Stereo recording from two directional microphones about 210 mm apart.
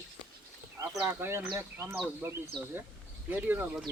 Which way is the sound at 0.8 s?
10° right (ahead or behind).